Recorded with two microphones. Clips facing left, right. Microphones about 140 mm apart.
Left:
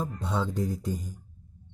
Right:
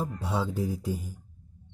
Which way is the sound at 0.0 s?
10° right (ahead or behind).